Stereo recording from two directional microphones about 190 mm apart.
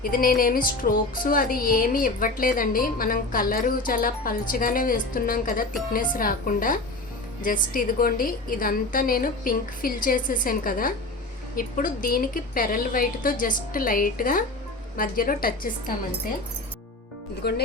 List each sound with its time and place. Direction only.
0.0 s speech: 50° left (ahead or behind)
17.4 s speech: 60° left (ahead or behind)